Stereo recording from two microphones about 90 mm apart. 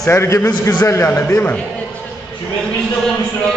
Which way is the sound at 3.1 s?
5° left (ahead or behind).